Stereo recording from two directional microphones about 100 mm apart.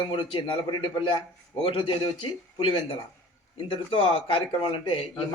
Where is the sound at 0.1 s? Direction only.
60° left (ahead or behind).